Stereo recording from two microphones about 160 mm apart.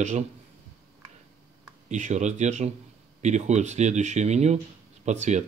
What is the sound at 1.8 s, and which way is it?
Speech, 45° right (ahead or behind).